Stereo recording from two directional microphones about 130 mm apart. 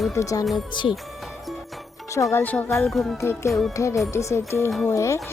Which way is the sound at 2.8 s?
Centre (ahead or behind).